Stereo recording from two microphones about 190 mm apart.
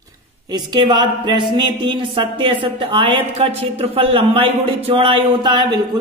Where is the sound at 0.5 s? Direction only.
25° right (ahead or behind).